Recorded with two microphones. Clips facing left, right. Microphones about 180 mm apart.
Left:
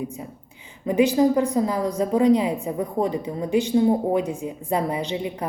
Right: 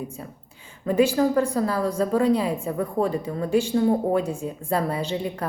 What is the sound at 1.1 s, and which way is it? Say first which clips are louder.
A woman's voice: left 2 dB; 15° left (ahead or behind).